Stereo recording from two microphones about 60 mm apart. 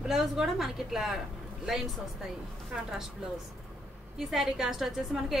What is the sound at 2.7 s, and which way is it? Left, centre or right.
Speech, centre.